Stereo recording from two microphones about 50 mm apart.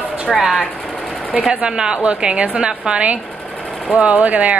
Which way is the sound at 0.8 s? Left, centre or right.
Centre.